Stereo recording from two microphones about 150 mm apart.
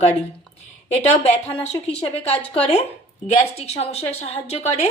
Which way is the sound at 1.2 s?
45° left (ahead or behind).